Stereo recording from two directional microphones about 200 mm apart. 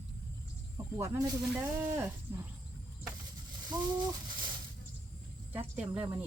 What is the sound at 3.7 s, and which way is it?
Speech, 20° right (ahead or behind).